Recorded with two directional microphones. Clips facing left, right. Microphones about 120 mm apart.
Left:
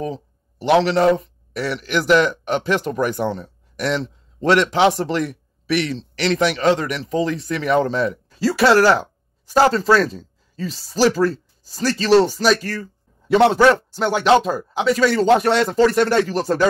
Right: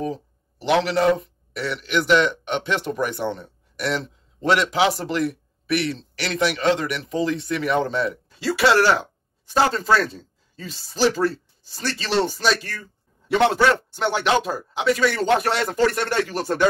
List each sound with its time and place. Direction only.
0.7 s speech: 35° left (ahead or behind)